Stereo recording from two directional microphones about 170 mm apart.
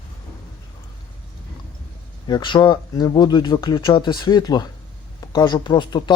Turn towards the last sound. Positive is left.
turn(degrees=25)  # may be behind; listen again after turning